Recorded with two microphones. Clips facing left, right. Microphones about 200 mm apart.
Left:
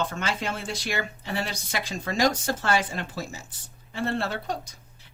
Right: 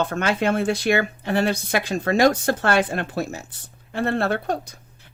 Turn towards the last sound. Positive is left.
turn(degrees=-60)  # may be behind; listen again after turning